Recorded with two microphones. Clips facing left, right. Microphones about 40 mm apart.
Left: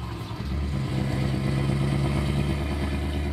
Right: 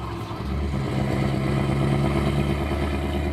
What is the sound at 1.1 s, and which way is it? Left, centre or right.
Vehicle, right.